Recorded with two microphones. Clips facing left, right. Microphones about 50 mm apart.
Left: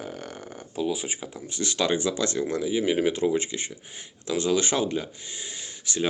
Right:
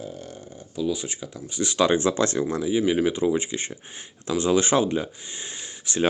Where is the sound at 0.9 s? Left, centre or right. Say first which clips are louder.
Right 1 dB; centre.